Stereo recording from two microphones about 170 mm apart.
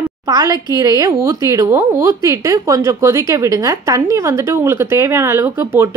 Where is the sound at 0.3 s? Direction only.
20° right (ahead or behind).